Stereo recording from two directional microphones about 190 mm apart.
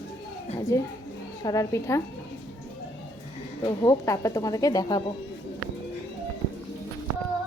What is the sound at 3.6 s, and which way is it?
Speech, 20° left (ahead or behind).